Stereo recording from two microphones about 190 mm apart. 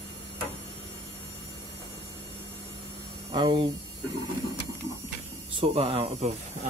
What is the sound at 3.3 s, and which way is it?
Speech, 25° right (ahead or behind).